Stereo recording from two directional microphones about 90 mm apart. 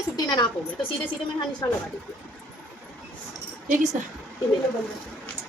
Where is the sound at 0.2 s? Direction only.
55° left (ahead or behind).